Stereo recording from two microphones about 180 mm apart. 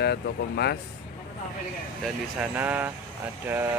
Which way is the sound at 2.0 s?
10° right (ahead or behind).